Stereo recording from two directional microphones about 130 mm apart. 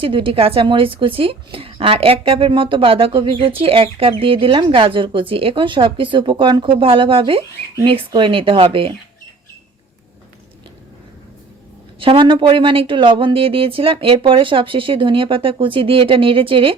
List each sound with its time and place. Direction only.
0.0 s a woman's voice: 45° right (ahead or behind)
11.9 s a woman's voice: 40° right (ahead or behind)